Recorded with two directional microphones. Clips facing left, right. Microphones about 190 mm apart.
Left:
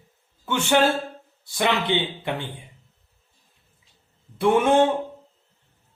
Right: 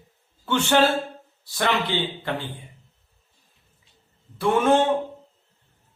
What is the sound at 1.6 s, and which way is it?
Speech, 20° left (ahead or behind).